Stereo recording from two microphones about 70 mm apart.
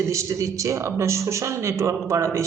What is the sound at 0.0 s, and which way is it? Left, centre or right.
A man's voice, right.